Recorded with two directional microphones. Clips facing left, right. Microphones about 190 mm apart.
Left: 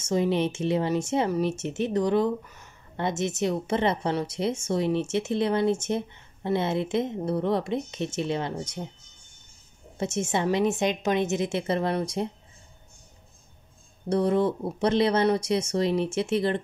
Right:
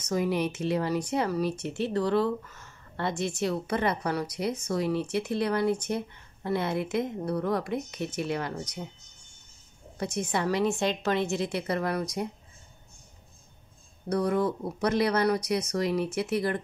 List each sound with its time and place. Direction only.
0.0 s speech: 25° left (ahead or behind)
9.9 s speech: 25° left (ahead or behind)
14.0 s speech: 25° left (ahead or behind)